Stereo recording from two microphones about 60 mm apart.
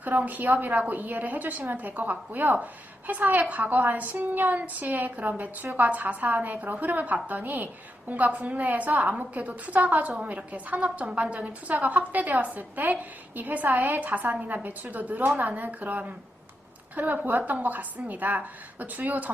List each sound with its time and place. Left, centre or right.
0.0 s a woman's voice: right